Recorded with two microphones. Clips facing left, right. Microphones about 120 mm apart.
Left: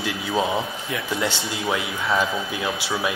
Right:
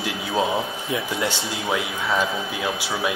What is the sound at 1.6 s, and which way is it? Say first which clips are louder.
Speech: even; centre (ahead or behind).